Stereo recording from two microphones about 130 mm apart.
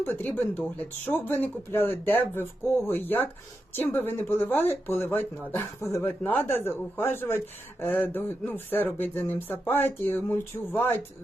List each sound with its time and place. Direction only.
0.0 s speech: 15° left (ahead or behind)